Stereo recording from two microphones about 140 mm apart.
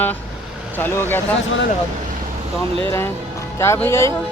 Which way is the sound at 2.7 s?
40° right (ahead or behind).